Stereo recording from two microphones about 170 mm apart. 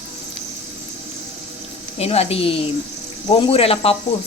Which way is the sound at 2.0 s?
35° left (ahead or behind).